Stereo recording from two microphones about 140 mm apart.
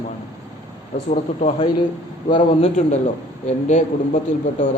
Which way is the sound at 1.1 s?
60° left (ahead or behind).